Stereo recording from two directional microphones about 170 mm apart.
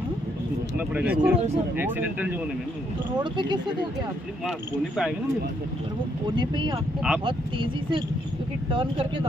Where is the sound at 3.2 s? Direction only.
25° right (ahead or behind).